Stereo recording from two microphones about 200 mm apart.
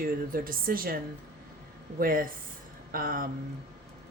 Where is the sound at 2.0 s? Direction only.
45° right (ahead or behind).